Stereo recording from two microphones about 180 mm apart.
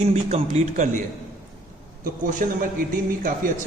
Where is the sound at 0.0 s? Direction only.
35° right (ahead or behind).